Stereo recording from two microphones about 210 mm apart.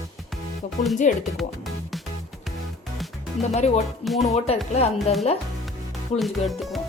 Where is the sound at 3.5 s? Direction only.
30° left (ahead or behind).